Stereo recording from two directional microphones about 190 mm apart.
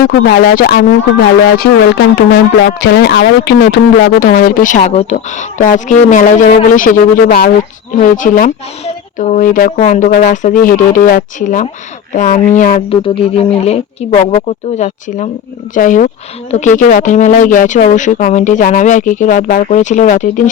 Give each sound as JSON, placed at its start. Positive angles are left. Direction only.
{"t": 0.3, "sound": "speech", "side_deg": 55}
{"t": 7.9, "sound": "speech", "side_deg": 45}
{"t": 12.9, "sound": "speech", "side_deg": 30}